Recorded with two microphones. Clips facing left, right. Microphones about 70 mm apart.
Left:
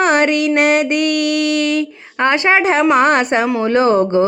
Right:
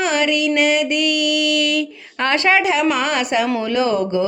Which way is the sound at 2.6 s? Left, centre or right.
Left.